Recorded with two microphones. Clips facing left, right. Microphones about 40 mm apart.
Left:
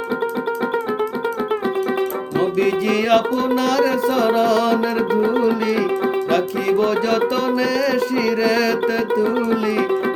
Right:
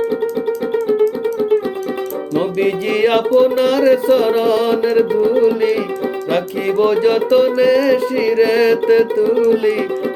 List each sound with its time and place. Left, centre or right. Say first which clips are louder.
0.9 s music: right 6 dB; centre
2.4 s music: even; right
6.3 s music: right 3 dB; right
9.3 s music: right 6 dB; centre